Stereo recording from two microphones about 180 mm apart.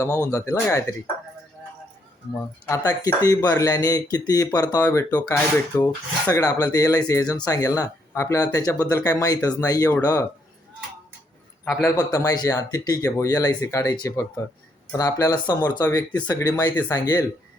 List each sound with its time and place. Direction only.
0.0 s speech: 15° left (ahead or behind)
2.6 s speech: 20° left (ahead or behind)
4.8 s speech: 10° left (ahead or behind)
11.6 s a man's voice: centre (ahead or behind)
11.9 s speech: 15° left (ahead or behind)